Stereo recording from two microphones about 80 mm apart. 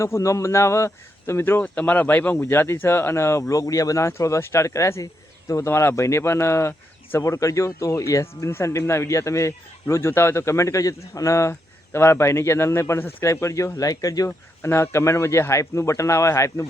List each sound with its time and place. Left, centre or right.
0.0 s speech: left
1.6 s speech: centre; by 3.4 s left
3.5 s speech: left
13.2 s speech: left
14.3 s speech: left